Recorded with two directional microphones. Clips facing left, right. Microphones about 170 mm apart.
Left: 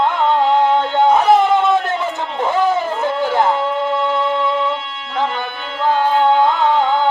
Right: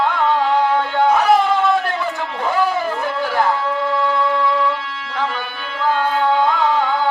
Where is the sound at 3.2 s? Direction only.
20° left (ahead or behind).